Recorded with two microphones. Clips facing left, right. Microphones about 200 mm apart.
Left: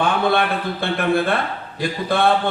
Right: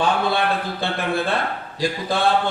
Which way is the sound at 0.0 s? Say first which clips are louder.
Left 2 dB; 55° left (ahead or behind).